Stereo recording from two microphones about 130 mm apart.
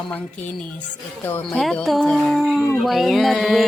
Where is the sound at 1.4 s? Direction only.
5° left (ahead or behind).